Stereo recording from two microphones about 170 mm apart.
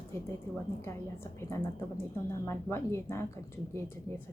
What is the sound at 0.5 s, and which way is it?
A woman's voice, 15° left (ahead or behind).